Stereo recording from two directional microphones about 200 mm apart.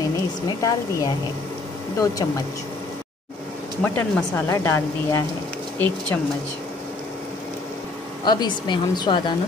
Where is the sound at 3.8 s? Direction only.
10° left (ahead or behind).